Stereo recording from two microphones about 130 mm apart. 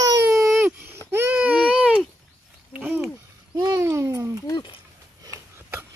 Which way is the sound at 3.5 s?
25° right (ahead or behind).